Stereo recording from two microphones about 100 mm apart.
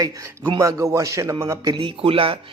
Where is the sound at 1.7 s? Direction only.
60° right (ahead or behind).